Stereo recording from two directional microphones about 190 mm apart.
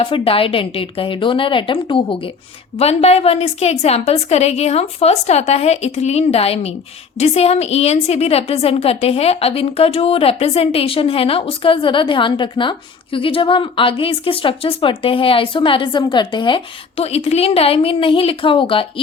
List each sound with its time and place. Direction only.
0.0 s a woman's voice: 30° left (ahead or behind)